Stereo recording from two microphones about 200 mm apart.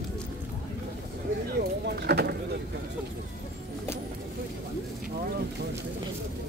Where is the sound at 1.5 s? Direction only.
55° right (ahead or behind).